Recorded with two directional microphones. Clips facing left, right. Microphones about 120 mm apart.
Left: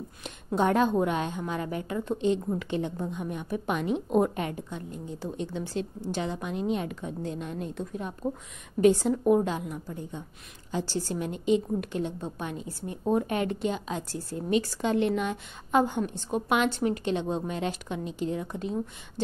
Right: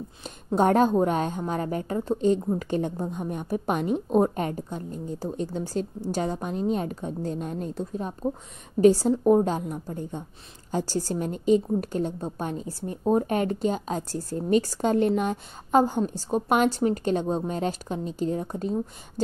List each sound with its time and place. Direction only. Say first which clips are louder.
0.6 s a woman's voice: right 4 dB; 45° right (ahead or behind)